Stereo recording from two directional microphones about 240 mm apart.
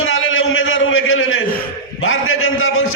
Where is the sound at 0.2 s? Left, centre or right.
Left.